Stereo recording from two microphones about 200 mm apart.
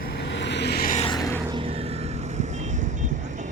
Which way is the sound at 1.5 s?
25° right (ahead or behind).